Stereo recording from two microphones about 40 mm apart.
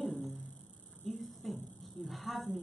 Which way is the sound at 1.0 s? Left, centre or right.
Centre.